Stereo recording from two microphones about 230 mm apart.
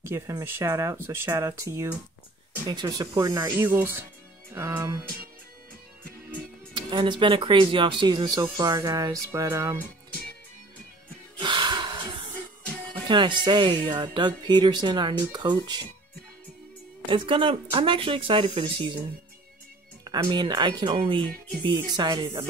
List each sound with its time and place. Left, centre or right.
0.1 s speech: centre
6.7 s speech: centre
11.3 s gasp: right
13.1 s speech: right
17.1 s speech: right
20.1 s speech: centre